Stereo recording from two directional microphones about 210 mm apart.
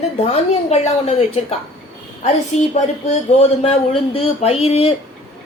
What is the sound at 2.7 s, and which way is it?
A woman's voice, 30° left (ahead or behind).